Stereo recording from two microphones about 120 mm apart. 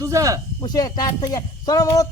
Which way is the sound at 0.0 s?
25° right (ahead or behind).